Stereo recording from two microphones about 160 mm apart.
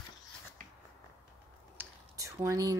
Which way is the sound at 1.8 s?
15° right (ahead or behind).